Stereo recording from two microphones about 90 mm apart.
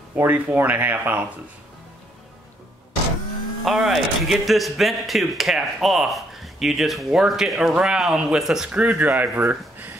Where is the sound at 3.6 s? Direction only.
5° right (ahead or behind).